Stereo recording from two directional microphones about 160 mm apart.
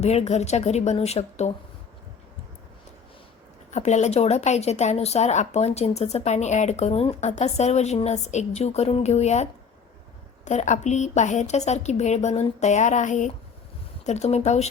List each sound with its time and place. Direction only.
0.0 s a woman's voice: 40° left (ahead or behind)
3.7 s a woman's voice: 45° left (ahead or behind)